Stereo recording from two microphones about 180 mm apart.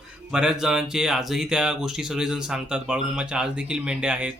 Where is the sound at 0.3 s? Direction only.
5° right (ahead or behind).